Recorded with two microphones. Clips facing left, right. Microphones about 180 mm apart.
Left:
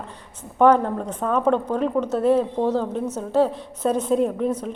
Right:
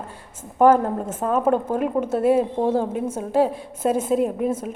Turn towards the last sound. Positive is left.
turn(degrees=-5)  # may be behind; listen again after turning